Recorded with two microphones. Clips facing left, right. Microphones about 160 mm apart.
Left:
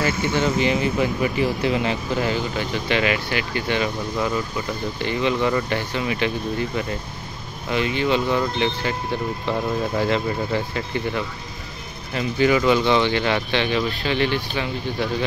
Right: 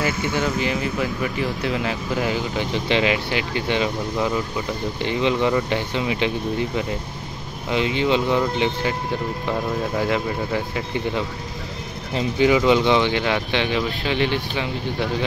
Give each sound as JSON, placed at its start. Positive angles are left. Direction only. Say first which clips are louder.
{"t": 0.6, "sound": "speech", "louder": "left 3 dB", "side_deg": 0}
{"t": 7.7, "sound": "speech", "louder": "right 1 dB", "side_deg": -20}
{"t": 12.1, "sound": "speech", "louder": "right 1 dB", "side_deg": -20}